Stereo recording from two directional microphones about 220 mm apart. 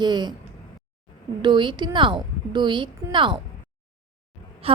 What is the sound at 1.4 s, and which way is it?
A woman's voice, 20° right (ahead or behind).